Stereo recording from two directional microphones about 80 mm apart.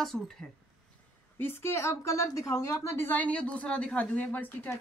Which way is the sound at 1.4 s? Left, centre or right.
Left.